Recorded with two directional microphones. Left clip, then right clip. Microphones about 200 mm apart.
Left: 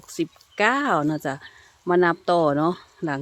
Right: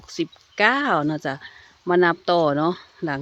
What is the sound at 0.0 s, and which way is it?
Speech, 5° right (ahead or behind).